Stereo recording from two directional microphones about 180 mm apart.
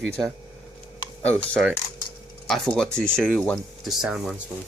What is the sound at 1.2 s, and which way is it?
Speech, 5° left (ahead or behind).